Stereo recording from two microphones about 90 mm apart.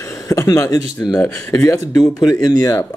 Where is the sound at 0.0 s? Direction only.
35° left (ahead or behind).